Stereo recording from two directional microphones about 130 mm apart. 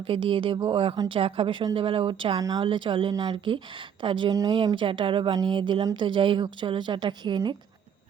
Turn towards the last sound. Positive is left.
turn(degrees=-35)  # may be behind; listen again after turning